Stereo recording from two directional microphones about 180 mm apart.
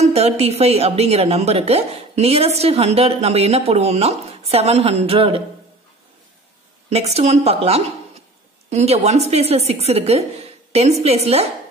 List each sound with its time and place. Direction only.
0.0 s a woman's voice: 35° right (ahead or behind)
6.9 s a woman's voice: 35° right (ahead or behind)